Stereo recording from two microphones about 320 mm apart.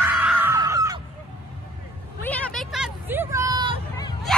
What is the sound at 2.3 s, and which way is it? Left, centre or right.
Vehicle, centre.